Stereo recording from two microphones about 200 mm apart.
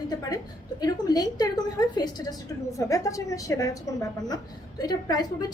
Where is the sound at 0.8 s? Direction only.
20° left (ahead or behind).